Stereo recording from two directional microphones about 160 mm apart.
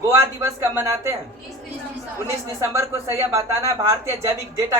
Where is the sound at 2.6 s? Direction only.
15° right (ahead or behind).